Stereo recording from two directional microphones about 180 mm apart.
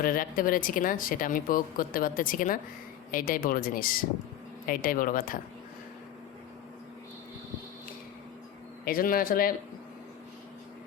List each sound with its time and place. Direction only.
0.0 s speech: 50° left (ahead or behind)
8.8 s speech: 50° left (ahead or behind)